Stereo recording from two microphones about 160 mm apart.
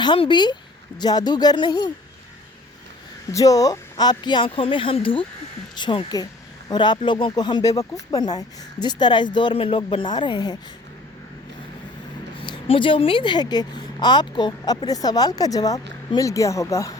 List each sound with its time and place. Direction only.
0.0 s speech: 30° left (ahead or behind)
3.3 s speech: 20° left (ahead or behind)
12.4 s speech: 35° left (ahead or behind)